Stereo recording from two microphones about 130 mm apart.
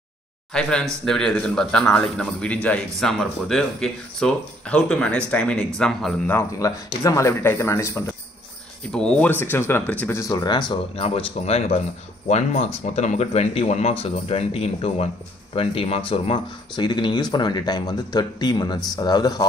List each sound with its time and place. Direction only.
0.5 s a man's voice: 5° left (ahead or behind)
6.6 s speech: 25° left (ahead or behind)
8.9 s speech: 5° left (ahead or behind)
10.1 s speech: 30° left (ahead or behind)
11.0 s speech: 45° left (ahead or behind); by 19.4 s 30° left (ahead or behind)